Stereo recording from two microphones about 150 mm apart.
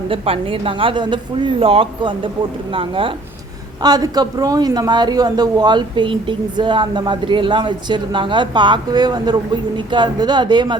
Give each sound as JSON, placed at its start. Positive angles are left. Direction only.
{"t": 0.1, "sound": "speech", "side_deg": -35}